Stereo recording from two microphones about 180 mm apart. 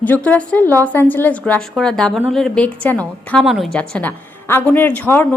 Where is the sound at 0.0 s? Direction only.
10° left (ahead or behind).